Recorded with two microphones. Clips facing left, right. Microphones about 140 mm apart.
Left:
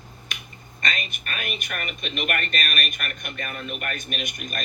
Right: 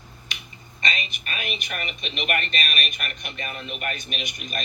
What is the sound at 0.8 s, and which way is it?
Speech, 50° left (ahead or behind).